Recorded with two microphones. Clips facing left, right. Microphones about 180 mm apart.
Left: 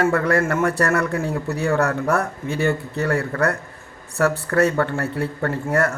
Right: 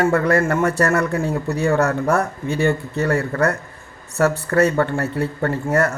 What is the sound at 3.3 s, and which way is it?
Speech, 20° right (ahead or behind).